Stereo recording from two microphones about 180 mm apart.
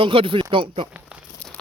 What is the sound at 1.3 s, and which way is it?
Crumpling, 5° left (ahead or behind).